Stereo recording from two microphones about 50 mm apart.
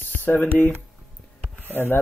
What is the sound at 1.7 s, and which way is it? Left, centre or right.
Speech, left.